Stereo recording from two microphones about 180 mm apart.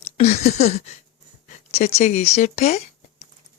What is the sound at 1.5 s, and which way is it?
Speech, 35° left (ahead or behind).